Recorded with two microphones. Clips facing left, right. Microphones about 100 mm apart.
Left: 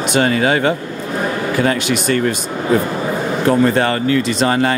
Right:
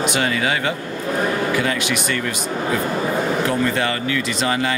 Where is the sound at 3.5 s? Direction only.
40° left (ahead or behind).